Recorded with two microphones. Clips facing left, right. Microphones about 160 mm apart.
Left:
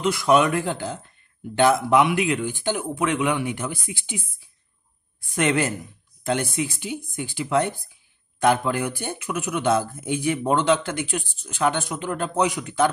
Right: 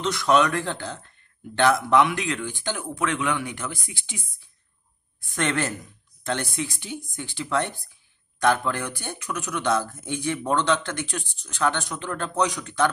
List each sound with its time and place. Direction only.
0.0 s speech: 10° left (ahead or behind)
5.3 s speech: 15° left (ahead or behind)